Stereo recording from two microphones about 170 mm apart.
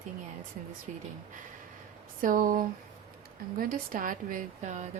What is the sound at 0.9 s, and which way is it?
Speech, 40° right (ahead or behind).